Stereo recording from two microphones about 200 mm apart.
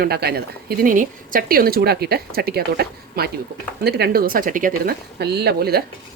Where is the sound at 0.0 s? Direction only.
50° right (ahead or behind).